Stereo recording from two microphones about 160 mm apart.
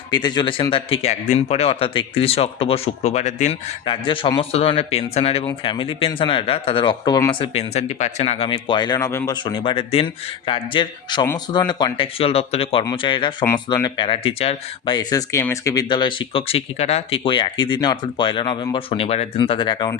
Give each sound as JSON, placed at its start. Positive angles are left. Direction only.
{"t": 0.1, "sound": "speech", "side_deg": 25}
{"t": 3.8, "sound": "speech", "side_deg": 30}
{"t": 14.9, "sound": "speech", "side_deg": 20}